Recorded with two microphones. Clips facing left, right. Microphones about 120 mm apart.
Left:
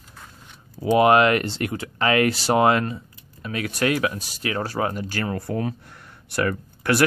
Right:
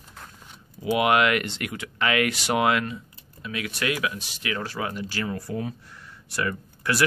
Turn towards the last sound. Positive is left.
turn(degrees=60)  # may be behind; listen again after turning